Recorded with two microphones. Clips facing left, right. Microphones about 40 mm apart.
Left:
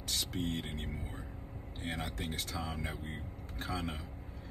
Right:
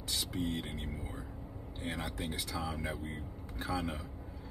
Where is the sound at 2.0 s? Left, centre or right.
Left.